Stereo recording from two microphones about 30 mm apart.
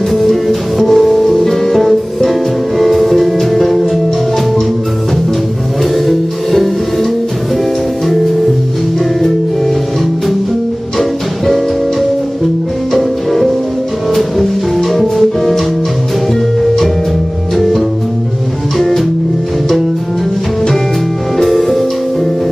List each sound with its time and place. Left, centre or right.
0.1 s music: centre
6.0 s music: centre
11.0 s music: centre
12.9 s music: centre
17.6 s music: centre
21.5 s music: centre